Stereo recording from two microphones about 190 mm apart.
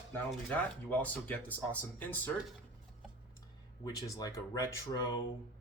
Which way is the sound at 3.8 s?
20° left (ahead or behind).